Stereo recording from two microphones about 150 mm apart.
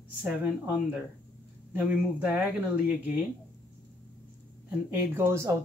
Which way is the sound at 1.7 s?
10° right (ahead or behind).